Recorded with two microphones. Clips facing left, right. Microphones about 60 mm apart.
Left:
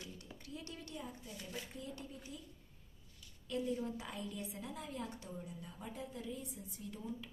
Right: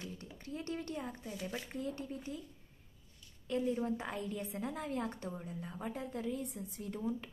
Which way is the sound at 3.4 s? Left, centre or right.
Right.